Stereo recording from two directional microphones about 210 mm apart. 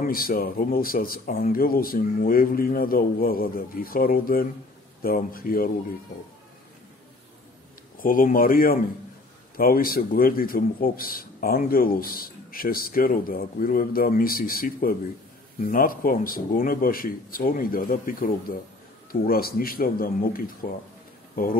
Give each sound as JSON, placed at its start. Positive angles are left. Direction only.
{"t": 0.0, "sound": "a man's voice", "side_deg": 45}
{"t": 8.0, "sound": "a man's voice", "side_deg": 40}